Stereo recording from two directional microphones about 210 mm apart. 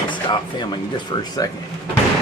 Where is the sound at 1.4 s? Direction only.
15° left (ahead or behind).